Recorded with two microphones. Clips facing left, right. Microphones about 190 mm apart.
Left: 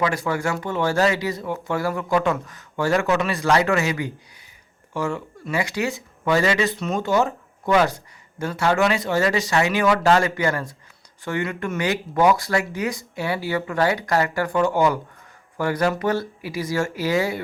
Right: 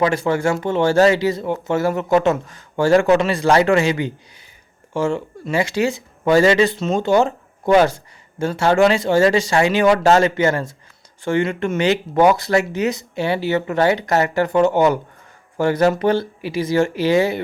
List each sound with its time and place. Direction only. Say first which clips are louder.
0.0 s speech: right 5 dB; 25° right (ahead or behind)